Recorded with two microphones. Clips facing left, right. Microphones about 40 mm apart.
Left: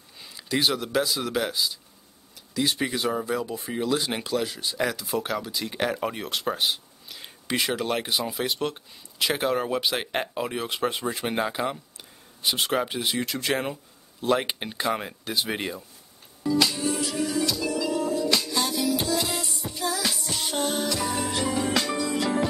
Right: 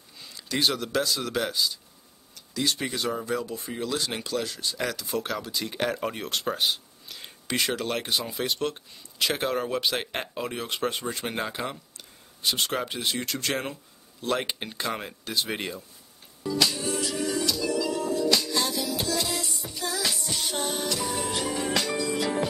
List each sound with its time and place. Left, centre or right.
0.2 s speech: centre
16.4 s music: centre
17.7 s music: centre
18.2 s music: centre
19.8 s music: centre